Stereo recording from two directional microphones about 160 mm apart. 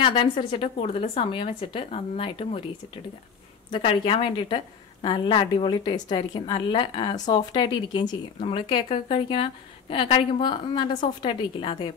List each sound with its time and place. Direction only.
0.0 s a woman's voice: 30° left (ahead or behind)
3.7 s a woman's voice: 35° left (ahead or behind)